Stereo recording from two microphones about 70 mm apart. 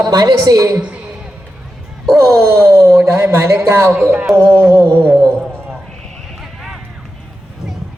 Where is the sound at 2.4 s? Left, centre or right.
Right.